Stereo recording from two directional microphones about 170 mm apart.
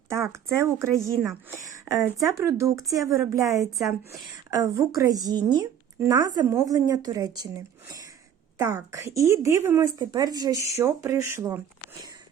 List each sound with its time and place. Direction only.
0.1 s speech: 15° right (ahead or behind)
1.2 s a woman's voice: 5° right (ahead or behind)
1.6 s a sound: 20° right (ahead or behind)
2.0 s a woman's voice: centre (ahead or behind)
2.2 s a woman's voice: 15° right (ahead or behind)